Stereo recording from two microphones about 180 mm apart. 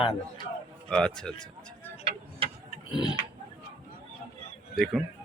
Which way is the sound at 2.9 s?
25° left (ahead or behind).